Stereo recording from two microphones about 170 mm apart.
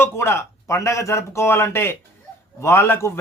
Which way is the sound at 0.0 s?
15° left (ahead or behind).